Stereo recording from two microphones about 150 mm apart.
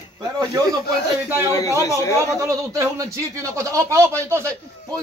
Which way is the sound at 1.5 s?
20° left (ahead or behind).